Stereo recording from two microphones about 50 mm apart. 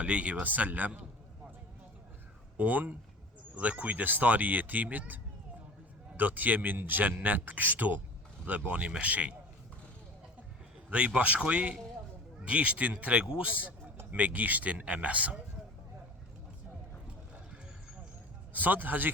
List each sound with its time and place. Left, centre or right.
0.0 s a man's voice: right
2.6 s a man's voice: right
10.9 s a man's voice: right
18.5 s speech: right